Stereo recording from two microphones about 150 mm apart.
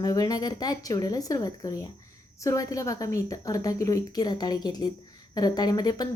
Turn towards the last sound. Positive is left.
turn(degrees=25)  # may be behind; listen again after turning